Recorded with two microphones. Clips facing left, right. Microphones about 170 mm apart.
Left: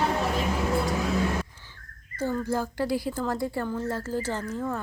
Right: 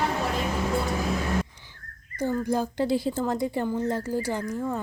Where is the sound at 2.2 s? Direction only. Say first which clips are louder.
Right 2 dB; 15° right (ahead or behind).